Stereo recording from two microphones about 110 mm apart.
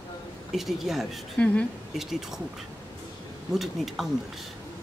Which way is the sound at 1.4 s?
10° left (ahead or behind).